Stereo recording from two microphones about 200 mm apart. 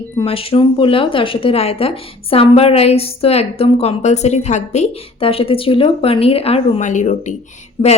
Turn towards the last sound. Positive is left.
turn(degrees=25)  # may be behind; listen again after turning